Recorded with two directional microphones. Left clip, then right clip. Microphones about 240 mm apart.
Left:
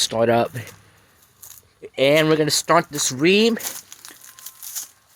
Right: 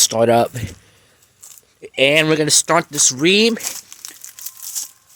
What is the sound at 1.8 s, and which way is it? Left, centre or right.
Speech, centre.